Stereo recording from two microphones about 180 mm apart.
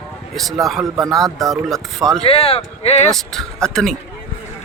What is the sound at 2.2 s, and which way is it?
Speech, 30° left (ahead or behind).